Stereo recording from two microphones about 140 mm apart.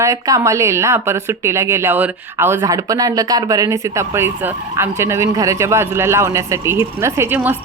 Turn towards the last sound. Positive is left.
turn(degrees=-15)  # may be behind; listen again after turning